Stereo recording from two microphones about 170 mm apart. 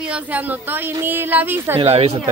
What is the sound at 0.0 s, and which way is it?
Speech, 10° right (ahead or behind).